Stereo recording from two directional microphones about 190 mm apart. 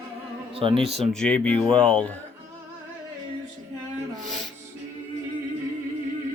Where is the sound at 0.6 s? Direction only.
30° right (ahead or behind).